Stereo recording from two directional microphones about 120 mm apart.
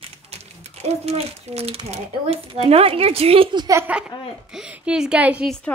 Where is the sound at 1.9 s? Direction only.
55° right (ahead or behind).